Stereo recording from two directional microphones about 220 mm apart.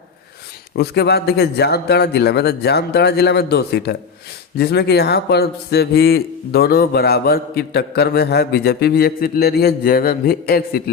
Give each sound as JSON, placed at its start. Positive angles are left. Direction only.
{"t": 0.8, "sound": "a man's voice", "side_deg": 45}